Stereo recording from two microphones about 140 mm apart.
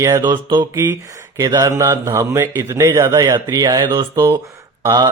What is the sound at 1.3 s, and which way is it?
A man's voice, 25° right (ahead or behind).